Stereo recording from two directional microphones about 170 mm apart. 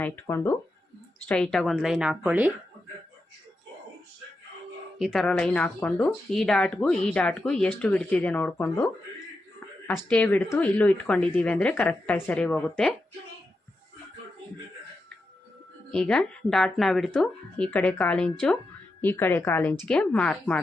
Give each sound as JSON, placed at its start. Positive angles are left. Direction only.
{"t": 0.0, "sound": "speech", "side_deg": 15}
{"t": 1.3, "sound": "speech", "side_deg": 5}
{"t": 4.9, "sound": "speech", "side_deg": 0}
{"t": 15.9, "sound": "speech", "side_deg": 5}